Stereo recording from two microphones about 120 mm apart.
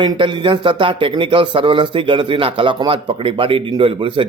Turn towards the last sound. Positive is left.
turn(degrees=-45)  # may be behind; listen again after turning